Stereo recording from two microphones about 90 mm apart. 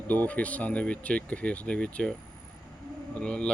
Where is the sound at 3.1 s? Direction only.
10° left (ahead or behind).